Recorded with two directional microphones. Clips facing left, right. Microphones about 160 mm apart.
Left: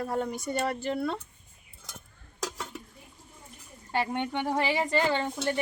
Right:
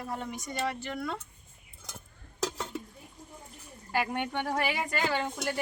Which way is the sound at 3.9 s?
25° left (ahead or behind).